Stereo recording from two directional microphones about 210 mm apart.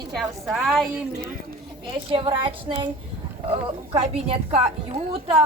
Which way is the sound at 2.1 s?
25° right (ahead or behind).